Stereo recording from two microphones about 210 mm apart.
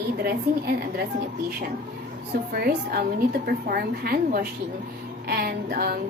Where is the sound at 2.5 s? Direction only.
45° right (ahead or behind).